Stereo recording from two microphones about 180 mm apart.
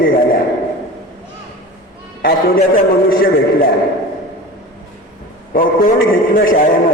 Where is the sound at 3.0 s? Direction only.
55° left (ahead or behind).